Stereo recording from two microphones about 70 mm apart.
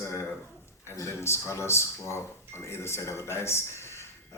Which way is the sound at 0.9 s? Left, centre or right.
Left.